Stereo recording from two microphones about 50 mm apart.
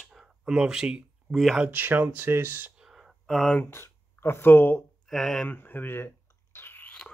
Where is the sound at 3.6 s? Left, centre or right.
Left.